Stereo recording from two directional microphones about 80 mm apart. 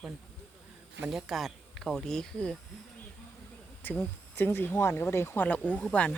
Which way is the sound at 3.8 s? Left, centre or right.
Left.